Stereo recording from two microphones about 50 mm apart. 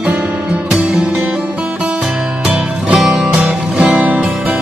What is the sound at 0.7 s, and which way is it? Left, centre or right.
Music, centre.